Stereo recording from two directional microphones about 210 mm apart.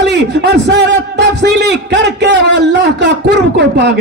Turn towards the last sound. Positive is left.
turn(degrees=-55)  # may be behind; listen again after turning